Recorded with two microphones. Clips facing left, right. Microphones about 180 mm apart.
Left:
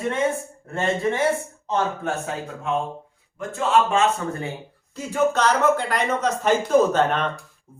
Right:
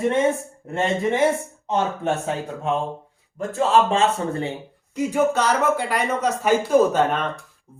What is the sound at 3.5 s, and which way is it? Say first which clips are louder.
Speech: right 1 dB; 35° right (ahead or behind).